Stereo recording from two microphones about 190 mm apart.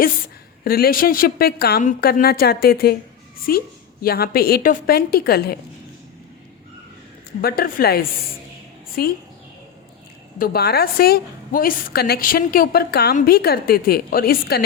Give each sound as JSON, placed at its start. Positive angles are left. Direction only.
{"t": 0.6, "sound": "a woman's voice", "side_deg": 50}
{"t": 7.4, "sound": "a woman's voice", "side_deg": 50}
{"t": 10.3, "sound": "a woman's voice", "side_deg": 50}